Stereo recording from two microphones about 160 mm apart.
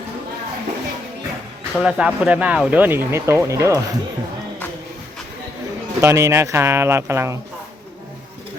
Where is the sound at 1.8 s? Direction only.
5° right (ahead or behind).